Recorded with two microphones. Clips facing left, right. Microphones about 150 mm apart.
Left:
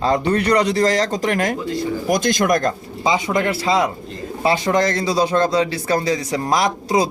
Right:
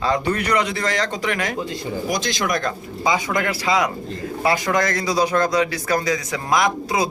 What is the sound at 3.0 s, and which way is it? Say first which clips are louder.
A man's voice: left 2 dB; 25° left (ahead or behind).